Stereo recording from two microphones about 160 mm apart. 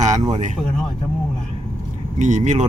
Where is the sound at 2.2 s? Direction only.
50° right (ahead or behind).